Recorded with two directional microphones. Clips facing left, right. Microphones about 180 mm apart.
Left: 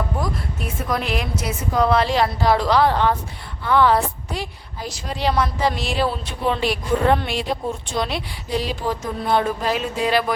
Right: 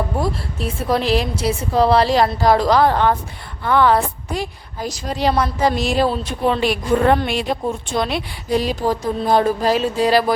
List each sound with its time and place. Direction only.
0.2 s a woman's voice: 30° right (ahead or behind)